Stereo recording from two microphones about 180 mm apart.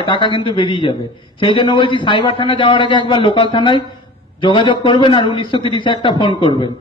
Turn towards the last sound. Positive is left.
turn(degrees=25)  # may be behind; listen again after turning